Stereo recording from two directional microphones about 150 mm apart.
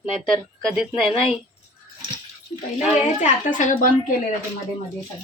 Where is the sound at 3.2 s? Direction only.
55° left (ahead or behind).